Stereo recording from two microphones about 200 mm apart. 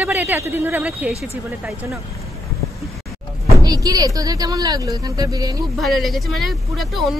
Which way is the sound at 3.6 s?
20° right (ahead or behind).